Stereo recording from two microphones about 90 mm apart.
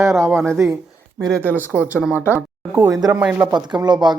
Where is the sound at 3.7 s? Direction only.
55° right (ahead or behind).